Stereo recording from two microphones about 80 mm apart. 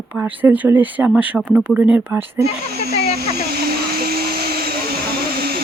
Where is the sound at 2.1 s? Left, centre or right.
Right.